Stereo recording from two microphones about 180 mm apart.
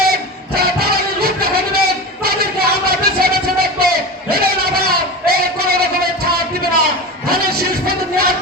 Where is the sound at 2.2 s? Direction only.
60° right (ahead or behind).